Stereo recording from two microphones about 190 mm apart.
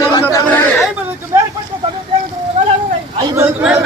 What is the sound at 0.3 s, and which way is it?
Chatter, 10° left (ahead or behind).